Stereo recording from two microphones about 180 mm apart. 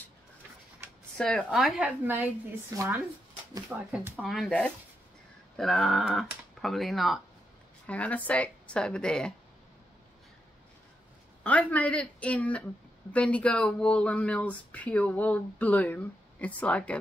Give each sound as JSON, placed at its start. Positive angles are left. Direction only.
{"t": 1.1, "sound": "speech", "side_deg": 0}
{"t": 2.7, "sound": "speech", "side_deg": -15}
{"t": 4.2, "sound": "speech", "side_deg": 5}
{"t": 11.4, "sound": "speech", "side_deg": 5}